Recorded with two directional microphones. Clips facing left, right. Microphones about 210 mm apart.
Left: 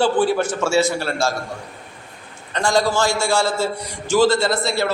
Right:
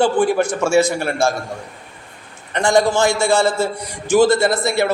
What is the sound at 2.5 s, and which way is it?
A man's voice, 20° right (ahead or behind).